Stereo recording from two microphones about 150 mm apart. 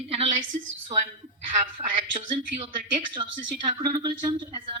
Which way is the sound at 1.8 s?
35° right (ahead or behind).